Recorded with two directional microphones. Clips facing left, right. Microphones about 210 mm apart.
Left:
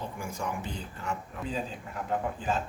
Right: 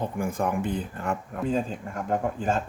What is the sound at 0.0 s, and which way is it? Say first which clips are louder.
Speech: right 8 dB; 55° right (ahead or behind).